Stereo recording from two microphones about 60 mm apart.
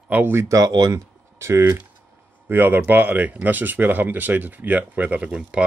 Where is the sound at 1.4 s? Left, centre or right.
Right.